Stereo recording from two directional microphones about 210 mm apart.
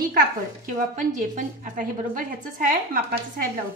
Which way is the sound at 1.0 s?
35° right (ahead or behind).